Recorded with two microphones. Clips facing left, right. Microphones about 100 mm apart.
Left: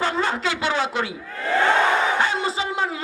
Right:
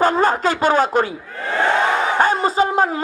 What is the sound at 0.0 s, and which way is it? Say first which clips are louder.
Speech: right 7 dB; 45° right (ahead or behind).